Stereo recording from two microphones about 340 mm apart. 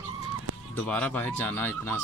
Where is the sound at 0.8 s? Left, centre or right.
Centre.